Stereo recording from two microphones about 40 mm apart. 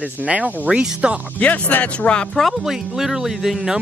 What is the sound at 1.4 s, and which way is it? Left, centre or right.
Speech, left.